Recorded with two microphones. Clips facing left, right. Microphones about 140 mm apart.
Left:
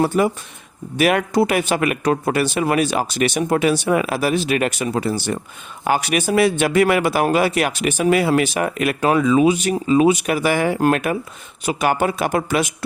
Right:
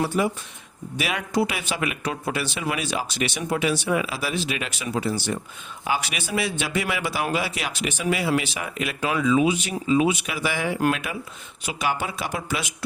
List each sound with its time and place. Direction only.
0.0 s speech: 50° left (ahead or behind)